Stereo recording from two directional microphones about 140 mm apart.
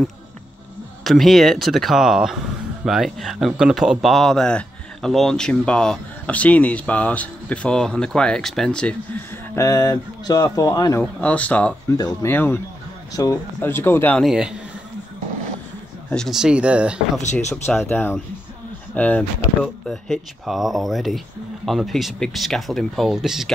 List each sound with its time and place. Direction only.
1.0 s speech: centre (ahead or behind)
9.6 s speech: 20° left (ahead or behind)
11.0 s speech: 10° left (ahead or behind)
14.2 s speech: 5° right (ahead or behind)
16.1 s speech: centre (ahead or behind)
17.2 s speech: 55° left (ahead or behind)
17.8 s speech: 15° left (ahead or behind); by 23.5 s 5° right (ahead or behind)